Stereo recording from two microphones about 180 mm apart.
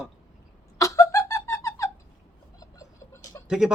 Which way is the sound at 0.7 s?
20° left (ahead or behind).